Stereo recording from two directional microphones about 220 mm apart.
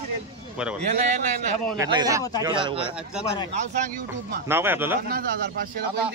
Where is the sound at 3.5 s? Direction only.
35° right (ahead or behind).